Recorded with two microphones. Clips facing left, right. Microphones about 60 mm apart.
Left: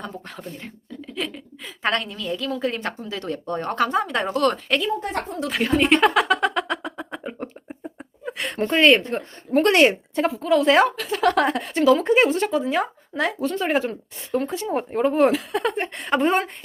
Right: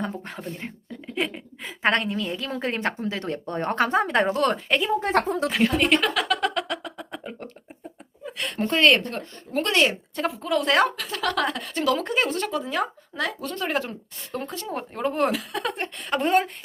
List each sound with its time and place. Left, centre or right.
1.1 s a woman's voice: right
4.9 s a woman's voice: right
5.5 s a woman's voice: centre
6.0 s a woman's voice: left
6.3 s music: centre
8.4 s speech: centre
9.5 s speech: left
10.2 s a woman's voice: centre
11.1 s a woman's voice: left
11.8 s speech: centre
12.1 s a woman's voice: centre
12.5 s speech: centre
15.0 s a woman's voice: centre